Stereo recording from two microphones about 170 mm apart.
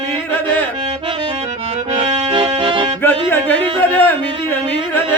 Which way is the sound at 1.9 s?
30° right (ahead or behind).